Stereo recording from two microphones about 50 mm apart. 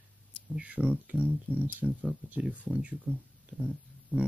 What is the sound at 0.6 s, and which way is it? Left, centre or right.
Speech, right.